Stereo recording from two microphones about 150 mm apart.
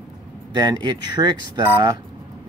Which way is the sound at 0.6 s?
30° right (ahead or behind).